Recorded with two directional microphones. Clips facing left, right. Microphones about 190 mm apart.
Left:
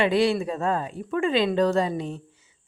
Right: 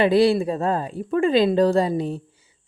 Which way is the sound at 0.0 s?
35° right (ahead or behind).